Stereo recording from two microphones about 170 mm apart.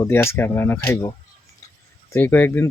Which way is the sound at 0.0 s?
15° left (ahead or behind).